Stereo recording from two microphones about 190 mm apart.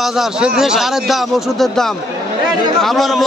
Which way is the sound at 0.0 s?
Centre (ahead or behind).